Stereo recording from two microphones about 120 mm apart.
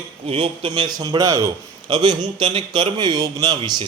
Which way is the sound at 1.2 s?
30° right (ahead or behind).